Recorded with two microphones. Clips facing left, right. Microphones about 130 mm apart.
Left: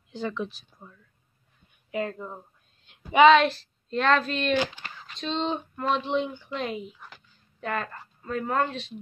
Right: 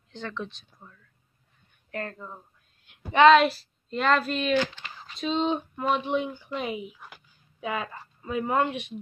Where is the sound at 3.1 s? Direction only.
Centre (ahead or behind).